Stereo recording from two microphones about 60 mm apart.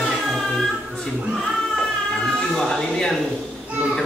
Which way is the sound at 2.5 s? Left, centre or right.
Centre.